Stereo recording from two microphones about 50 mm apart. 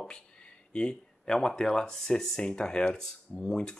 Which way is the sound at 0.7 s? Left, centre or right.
Centre.